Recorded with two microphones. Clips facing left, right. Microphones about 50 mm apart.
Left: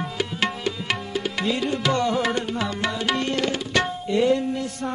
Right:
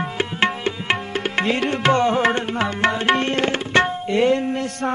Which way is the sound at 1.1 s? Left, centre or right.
Right.